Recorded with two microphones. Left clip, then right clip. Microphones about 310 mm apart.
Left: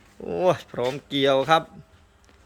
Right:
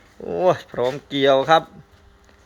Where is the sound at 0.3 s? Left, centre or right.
Centre.